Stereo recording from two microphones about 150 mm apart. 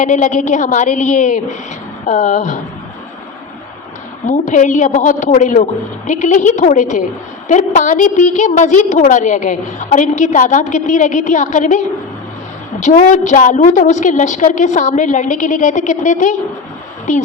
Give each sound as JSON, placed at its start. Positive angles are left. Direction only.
{"t": 0.0, "sound": "a woman's voice", "side_deg": 55}
{"t": 4.3, "sound": "a woman's voice", "side_deg": 55}
{"t": 12.8, "sound": "a woman's voice", "side_deg": 55}